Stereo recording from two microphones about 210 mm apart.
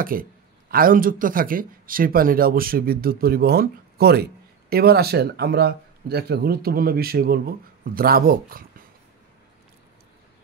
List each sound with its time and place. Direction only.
0.0 s speech: 45° right (ahead or behind)